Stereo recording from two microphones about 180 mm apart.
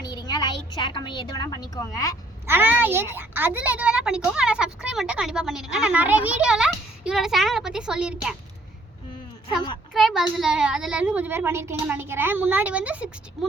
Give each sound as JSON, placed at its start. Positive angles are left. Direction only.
{"t": 0.1, "sound": "a sound", "side_deg": 25}
{"t": 0.7, "sound": "a woman's voice", "side_deg": 25}
{"t": 2.5, "sound": "a child's voice", "side_deg": -10}
{"t": 9.9, "sound": "a woman's voice", "side_deg": 0}